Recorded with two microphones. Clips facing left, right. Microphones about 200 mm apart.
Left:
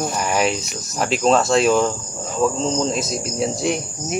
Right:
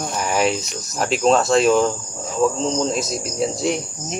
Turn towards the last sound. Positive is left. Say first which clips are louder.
# even
turn(degrees=0)  # may be behind; listen again after turning